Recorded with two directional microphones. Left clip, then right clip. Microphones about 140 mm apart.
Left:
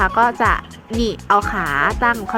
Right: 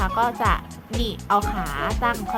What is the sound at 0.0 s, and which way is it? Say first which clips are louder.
Speech: left 7 dB; 25° left (ahead or behind).